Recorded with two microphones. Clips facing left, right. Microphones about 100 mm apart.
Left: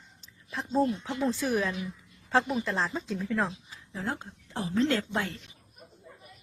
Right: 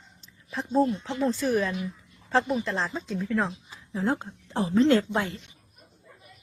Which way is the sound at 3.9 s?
15° right (ahead or behind).